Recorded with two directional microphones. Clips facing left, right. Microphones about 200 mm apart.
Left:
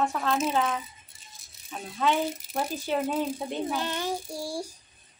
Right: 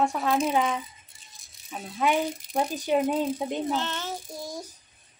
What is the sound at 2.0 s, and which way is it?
Speech, 15° right (ahead or behind).